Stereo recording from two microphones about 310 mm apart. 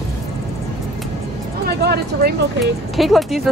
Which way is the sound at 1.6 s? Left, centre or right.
Right.